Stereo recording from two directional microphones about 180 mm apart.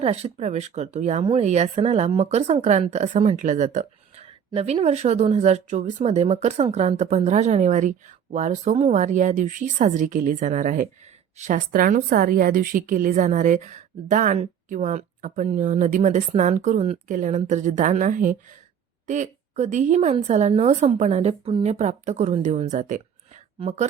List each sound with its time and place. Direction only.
0.0 s a woman's voice: 35° right (ahead or behind)